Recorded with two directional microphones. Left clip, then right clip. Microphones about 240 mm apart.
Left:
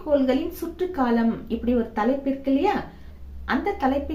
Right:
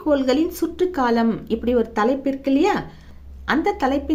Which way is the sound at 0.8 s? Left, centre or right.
Right.